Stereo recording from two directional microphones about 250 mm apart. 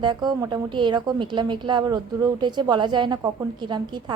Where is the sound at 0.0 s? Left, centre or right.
Centre.